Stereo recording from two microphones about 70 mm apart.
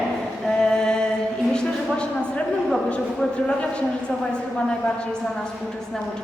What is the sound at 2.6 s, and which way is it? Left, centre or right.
A man's voice, centre.